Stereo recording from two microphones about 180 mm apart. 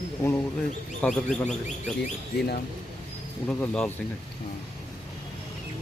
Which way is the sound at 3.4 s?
5° left (ahead or behind).